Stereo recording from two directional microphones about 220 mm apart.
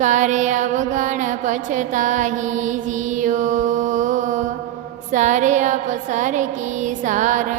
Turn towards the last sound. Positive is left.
turn(degrees=-35)  # may be behind; listen again after turning